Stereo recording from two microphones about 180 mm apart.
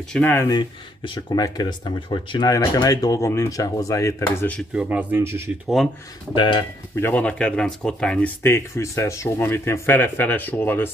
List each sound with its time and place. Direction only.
0.1 s speech: 10° left (ahead or behind)
0.6 s speech: 25° left (ahead or behind)
4.6 s speech: 5° right (ahead or behind)
6.3 s speech: 25° left (ahead or behind)
7.0 s speech: 10° left (ahead or behind)